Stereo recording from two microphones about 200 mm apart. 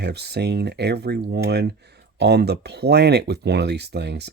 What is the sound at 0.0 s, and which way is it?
Speech, 55° right (ahead or behind).